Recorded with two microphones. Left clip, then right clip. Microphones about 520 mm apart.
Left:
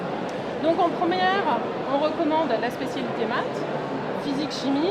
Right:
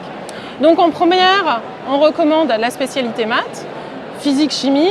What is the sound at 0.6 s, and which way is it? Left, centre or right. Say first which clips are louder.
A woman's voice: right 11 dB; right.